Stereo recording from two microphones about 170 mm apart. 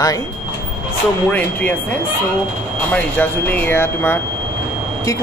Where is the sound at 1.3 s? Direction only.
10° left (ahead or behind).